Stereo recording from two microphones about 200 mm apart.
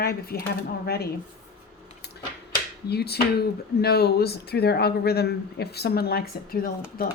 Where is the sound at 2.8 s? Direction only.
55° left (ahead or behind).